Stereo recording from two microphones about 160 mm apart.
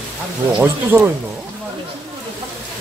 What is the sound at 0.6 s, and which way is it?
Speech, 10° right (ahead or behind).